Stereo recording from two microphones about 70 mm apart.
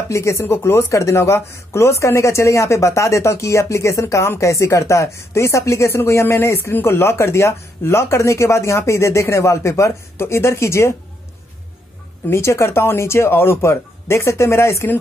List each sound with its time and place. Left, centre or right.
0.1 s speech: left
12.3 s speech: left